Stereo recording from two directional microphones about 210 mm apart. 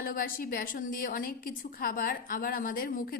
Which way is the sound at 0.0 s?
40° left (ahead or behind).